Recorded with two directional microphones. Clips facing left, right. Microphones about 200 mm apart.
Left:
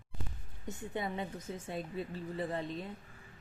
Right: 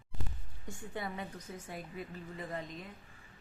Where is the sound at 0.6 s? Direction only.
20° left (ahead or behind).